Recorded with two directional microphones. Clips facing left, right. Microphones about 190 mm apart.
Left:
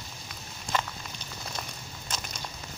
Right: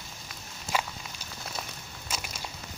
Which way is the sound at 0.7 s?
5° right (ahead or behind).